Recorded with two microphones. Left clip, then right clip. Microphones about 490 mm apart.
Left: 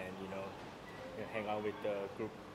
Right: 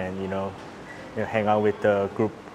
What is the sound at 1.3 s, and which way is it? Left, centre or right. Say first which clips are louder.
Speech: right 18 dB; right.